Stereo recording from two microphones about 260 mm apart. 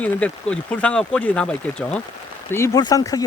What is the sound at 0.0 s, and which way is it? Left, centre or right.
Speech, centre.